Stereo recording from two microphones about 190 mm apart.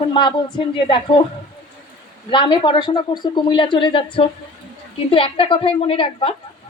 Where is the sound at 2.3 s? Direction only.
25° left (ahead or behind).